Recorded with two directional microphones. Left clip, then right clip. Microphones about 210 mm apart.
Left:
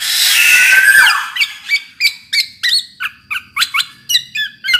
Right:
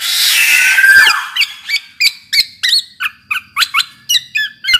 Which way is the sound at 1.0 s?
15° right (ahead or behind).